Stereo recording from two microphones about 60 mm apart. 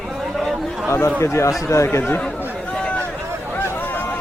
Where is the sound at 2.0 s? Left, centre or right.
Left.